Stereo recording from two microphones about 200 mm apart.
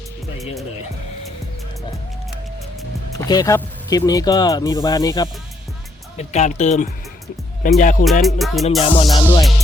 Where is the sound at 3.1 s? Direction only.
20° left (ahead or behind).